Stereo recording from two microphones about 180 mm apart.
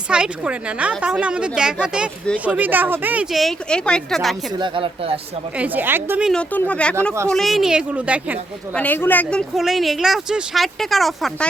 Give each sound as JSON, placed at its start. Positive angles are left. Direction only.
{"t": 0.1, "sound": "a woman's voice", "side_deg": -5}
{"t": 4.5, "sound": "speech", "side_deg": -25}
{"t": 5.5, "sound": "speech", "side_deg": -10}
{"t": 6.5, "sound": "a woman's voice", "side_deg": 5}
{"t": 8.7, "sound": "speech", "side_deg": 10}
{"t": 9.6, "sound": "a woman's voice", "side_deg": 0}